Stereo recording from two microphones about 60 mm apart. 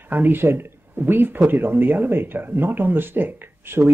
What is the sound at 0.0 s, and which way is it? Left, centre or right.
Speech, right.